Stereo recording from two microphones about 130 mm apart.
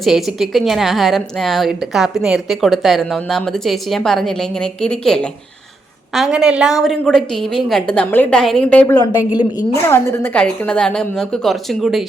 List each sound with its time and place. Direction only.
0.0 s a woman's voice: centre (ahead or behind)
6.1 s a woman's voice: 5° right (ahead or behind)
9.0 s a woman's voice: 30° left (ahead or behind)
9.7 s a woman's voice: 20° left (ahead or behind); by 12.0 s centre (ahead or behind)